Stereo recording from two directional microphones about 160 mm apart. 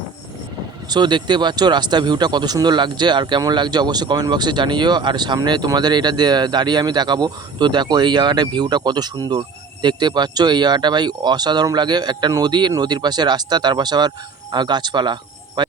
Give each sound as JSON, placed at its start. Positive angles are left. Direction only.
{"t": 0.9, "sound": "speech", "side_deg": -25}